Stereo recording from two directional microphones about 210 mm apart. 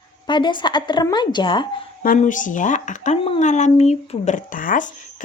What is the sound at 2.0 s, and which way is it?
Speech, 40° left (ahead or behind).